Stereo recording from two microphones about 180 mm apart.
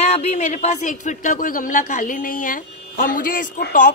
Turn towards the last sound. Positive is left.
turn(degrees=50)  # may be behind; listen again after turning